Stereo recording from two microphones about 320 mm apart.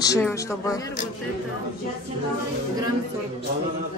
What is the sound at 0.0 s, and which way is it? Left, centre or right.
Speech, centre.